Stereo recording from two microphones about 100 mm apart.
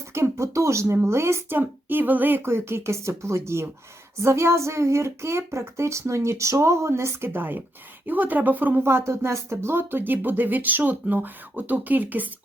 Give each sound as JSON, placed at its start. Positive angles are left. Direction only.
{"t": 0.1, "sound": "speech", "side_deg": -30}